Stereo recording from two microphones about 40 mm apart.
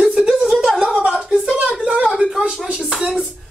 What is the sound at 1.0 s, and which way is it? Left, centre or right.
Speech, centre.